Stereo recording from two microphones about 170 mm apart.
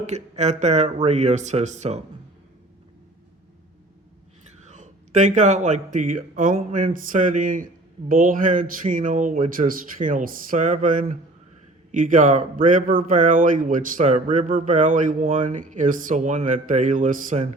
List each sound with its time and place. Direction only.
0.0 s a man's voice: 40° right (ahead or behind)
4.6 s a man's voice: 45° right (ahead or behind)